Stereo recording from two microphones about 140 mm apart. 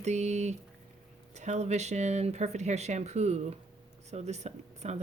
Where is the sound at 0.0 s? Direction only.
55° right (ahead or behind).